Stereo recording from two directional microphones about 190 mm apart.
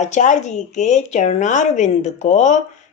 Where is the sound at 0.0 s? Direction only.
40° left (ahead or behind).